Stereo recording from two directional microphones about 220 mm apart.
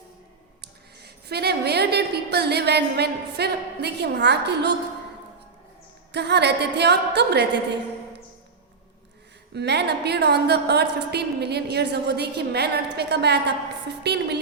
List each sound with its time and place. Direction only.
0.6 s a woman's voice: 45° right (ahead or behind)
6.1 s a woman's voice: 50° right (ahead or behind)
9.5 s a woman's voice: 50° right (ahead or behind)